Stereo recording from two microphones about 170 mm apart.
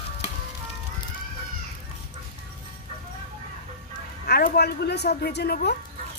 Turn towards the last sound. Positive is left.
turn(degrees=70)  # may be behind; listen again after turning